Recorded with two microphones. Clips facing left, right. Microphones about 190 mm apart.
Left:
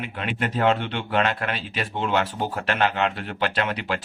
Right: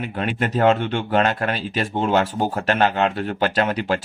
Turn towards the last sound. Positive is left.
turn(degrees=-45)  # may be behind; listen again after turning